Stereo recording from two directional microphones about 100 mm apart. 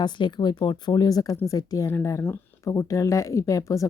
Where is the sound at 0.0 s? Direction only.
50° left (ahead or behind).